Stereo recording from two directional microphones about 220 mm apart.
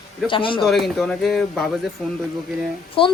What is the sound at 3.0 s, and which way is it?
Speech, 25° left (ahead or behind).